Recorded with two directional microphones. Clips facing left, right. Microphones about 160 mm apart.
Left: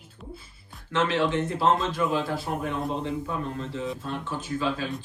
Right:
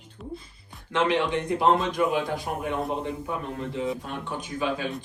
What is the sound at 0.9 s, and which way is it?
A man's voice, 15° right (ahead or behind).